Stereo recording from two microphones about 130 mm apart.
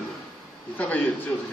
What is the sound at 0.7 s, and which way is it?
Speech, 10° left (ahead or behind).